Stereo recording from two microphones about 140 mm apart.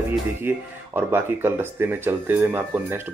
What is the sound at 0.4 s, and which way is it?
Speech, 15° right (ahead or behind).